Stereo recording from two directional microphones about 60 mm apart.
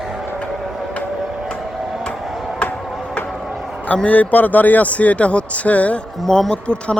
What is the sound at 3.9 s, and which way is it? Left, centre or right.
Speech, left.